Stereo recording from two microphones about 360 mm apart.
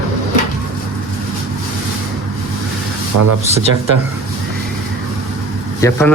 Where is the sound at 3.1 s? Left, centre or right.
Right.